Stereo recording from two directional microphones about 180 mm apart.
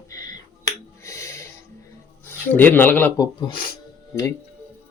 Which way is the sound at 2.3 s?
10° left (ahead or behind).